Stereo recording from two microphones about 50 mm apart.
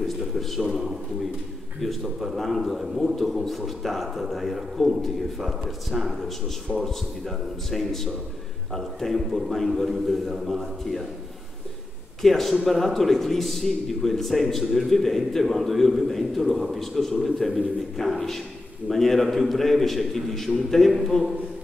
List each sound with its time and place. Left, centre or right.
0.0 s a man's voice: centre
12.2 s a man's voice: centre